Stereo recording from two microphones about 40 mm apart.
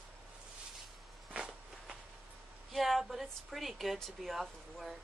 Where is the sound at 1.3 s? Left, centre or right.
Right.